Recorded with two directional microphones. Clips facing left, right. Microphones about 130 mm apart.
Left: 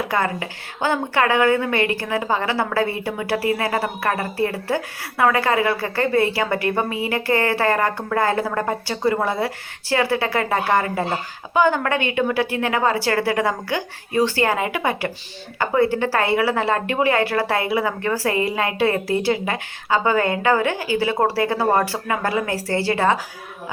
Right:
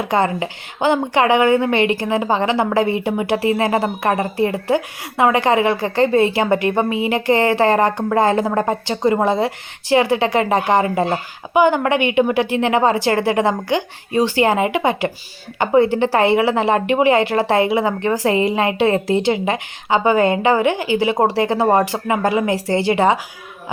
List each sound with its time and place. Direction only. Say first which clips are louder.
0.1 s a woman's voice: right 5 dB; 20° right (ahead or behind)